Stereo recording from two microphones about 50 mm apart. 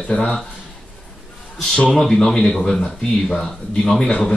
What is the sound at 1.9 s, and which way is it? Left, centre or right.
A man's voice, centre.